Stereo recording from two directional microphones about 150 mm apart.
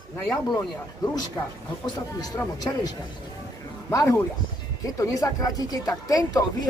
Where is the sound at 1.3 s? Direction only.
25° left (ahead or behind).